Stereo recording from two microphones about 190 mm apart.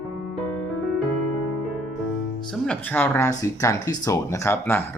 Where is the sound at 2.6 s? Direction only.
10° left (ahead or behind).